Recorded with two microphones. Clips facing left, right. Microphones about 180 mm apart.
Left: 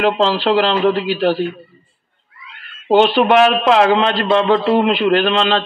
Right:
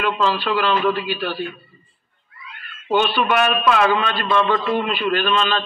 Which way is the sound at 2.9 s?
60° left (ahead or behind).